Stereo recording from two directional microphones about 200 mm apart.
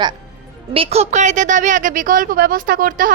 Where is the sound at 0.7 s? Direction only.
30° right (ahead or behind).